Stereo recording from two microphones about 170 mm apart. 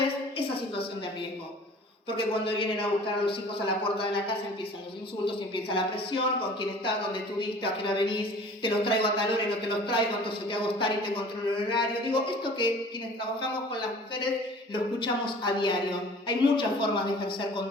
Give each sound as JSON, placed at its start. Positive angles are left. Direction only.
{"t": 0.0, "sound": "a sound", "side_deg": 35}
{"t": 2.0, "sound": "speech", "side_deg": 30}
{"t": 14.7, "sound": "speech", "side_deg": 30}